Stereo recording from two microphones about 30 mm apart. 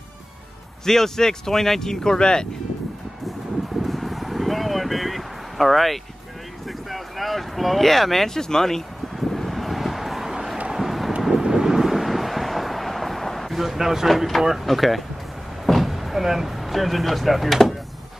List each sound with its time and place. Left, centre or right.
0.8 s speech: centre
3.3 s vehicle: centre
6.9 s speech: centre
8.4 s vehicle: centre
13.6 s a man's voice: centre
14.0 s a man's voice: centre
14.7 s speech: centre